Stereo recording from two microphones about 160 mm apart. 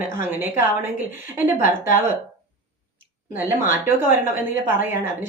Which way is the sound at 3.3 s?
15° right (ahead or behind).